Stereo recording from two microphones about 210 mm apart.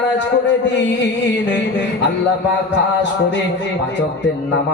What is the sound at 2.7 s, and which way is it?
Speech, 60° left (ahead or behind).